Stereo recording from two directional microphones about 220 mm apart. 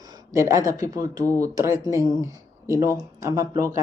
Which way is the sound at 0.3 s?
15° right (ahead or behind).